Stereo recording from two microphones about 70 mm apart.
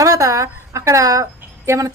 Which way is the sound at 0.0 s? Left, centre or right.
Right.